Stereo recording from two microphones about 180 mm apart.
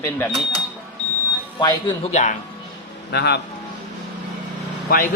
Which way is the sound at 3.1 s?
65° left (ahead or behind).